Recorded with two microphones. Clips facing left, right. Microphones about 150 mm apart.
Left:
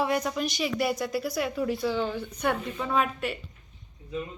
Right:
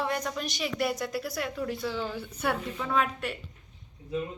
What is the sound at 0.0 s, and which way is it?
A woman's voice, 10° left (ahead or behind).